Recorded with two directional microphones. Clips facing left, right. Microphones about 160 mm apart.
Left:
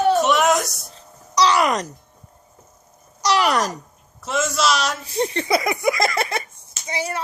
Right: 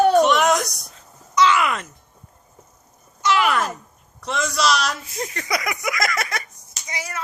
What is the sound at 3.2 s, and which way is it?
Speech, 40° left (ahead or behind).